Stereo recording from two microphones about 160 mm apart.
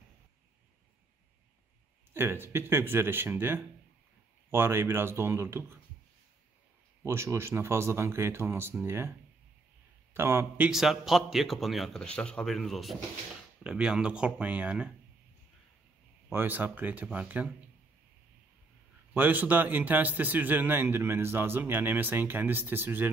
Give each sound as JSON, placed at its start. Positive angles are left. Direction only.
{"t": 2.1, "sound": "a man's voice", "side_deg": -15}
{"t": 7.0, "sound": "a man's voice", "side_deg": -15}
{"t": 10.1, "sound": "a man's voice", "side_deg": -15}
{"t": 10.7, "sound": "a man's voice", "side_deg": 0}
{"t": 16.3, "sound": "a man's voice", "side_deg": -15}
{"t": 19.1, "sound": "a man's voice", "side_deg": -10}